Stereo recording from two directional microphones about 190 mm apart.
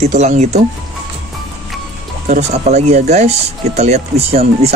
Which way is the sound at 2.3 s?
35° right (ahead or behind).